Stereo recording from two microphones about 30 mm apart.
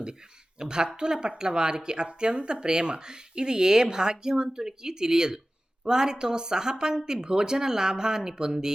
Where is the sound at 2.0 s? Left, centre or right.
Right.